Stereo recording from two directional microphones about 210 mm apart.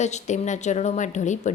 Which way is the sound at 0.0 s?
35° left (ahead or behind).